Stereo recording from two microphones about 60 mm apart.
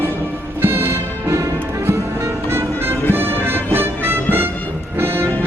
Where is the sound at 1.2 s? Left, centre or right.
Right.